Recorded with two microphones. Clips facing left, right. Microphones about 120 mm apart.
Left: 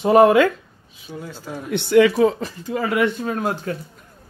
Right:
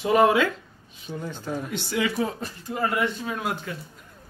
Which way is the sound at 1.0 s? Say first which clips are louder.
Even; 5° left (ahead or behind).